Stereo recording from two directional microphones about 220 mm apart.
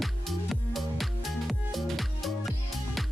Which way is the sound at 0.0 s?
Centre (ahead or behind).